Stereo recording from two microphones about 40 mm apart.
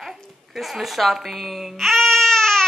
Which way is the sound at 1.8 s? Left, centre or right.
Centre.